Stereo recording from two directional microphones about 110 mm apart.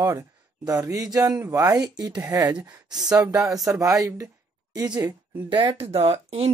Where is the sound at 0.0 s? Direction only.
30° right (ahead or behind).